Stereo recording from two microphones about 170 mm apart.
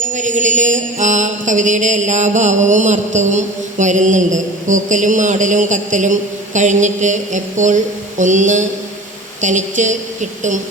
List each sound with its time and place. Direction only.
0.1 s mantra: 45° right (ahead or behind)